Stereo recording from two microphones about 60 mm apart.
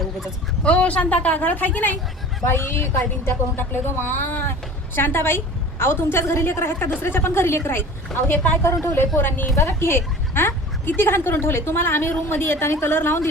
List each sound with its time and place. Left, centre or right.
0.6 s speech: left
2.5 s a woman's voice: left